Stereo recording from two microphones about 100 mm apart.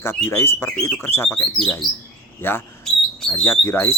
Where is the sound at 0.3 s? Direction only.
25° left (ahead or behind).